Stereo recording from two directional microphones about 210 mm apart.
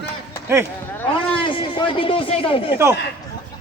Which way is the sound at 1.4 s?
25° left (ahead or behind).